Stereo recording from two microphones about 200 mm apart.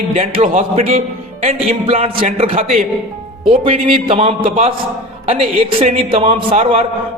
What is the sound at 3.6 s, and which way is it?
A man's voice, 25° right (ahead or behind).